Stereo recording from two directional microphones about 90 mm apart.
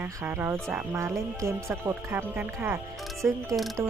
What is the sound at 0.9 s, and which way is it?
Speech, 35° right (ahead or behind).